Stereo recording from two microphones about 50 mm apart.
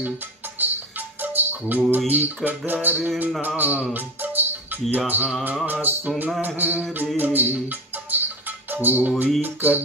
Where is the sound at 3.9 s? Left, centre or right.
Right.